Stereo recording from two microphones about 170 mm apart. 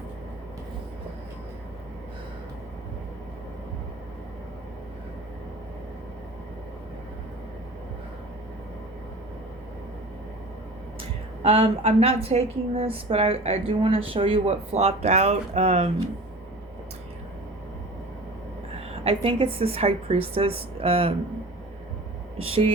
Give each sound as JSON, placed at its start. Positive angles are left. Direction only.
{"t": 11.4, "sound": "a woman's voice", "side_deg": -35}
{"t": 19.0, "sound": "a woman's voice", "side_deg": -30}
{"t": 22.4, "sound": "a woman's voice", "side_deg": -35}